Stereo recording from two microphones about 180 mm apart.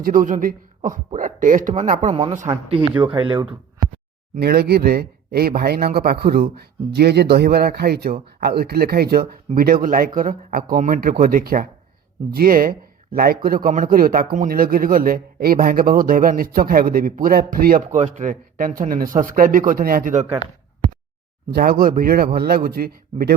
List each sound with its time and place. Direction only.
0.0 s a man's voice: 50° right (ahead or behind)
3.0 s speech: 25° right (ahead or behind)
4.4 s a man's voice: 60° right (ahead or behind); by 20.3 s 45° right (ahead or behind)
21.5 s speech: 55° right (ahead or behind)